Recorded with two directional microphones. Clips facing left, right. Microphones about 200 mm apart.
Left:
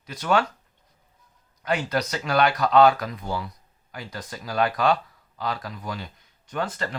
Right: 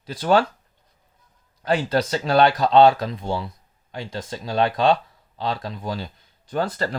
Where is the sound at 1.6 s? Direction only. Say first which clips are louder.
Right 4 dB; 30° right (ahead or behind).